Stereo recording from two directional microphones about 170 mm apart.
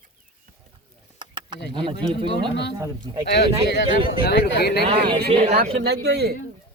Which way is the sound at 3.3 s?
80° left.